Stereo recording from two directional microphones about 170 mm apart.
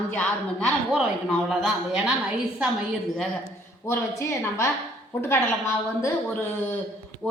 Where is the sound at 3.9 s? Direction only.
15° left (ahead or behind).